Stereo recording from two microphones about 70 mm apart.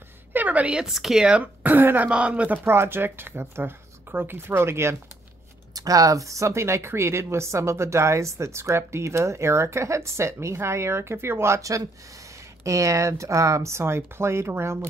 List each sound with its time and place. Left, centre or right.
0.3 s a woman's voice: right
0.8 s speech: centre
1.4 s speech: right
2.0 s speech: centre
2.6 s speech: right
5.8 s speech: right